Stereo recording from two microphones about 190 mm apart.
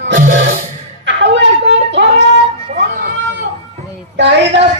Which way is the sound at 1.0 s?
70° right (ahead or behind).